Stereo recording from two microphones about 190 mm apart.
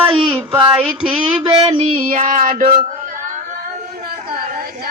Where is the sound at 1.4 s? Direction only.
30° right (ahead or behind).